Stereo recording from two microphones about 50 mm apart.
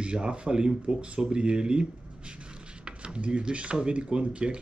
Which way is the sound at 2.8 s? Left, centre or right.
Right.